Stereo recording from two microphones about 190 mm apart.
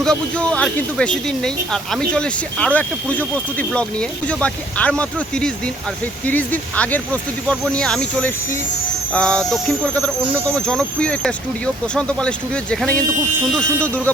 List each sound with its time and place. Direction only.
0.0 s speech: 5° left (ahead or behind)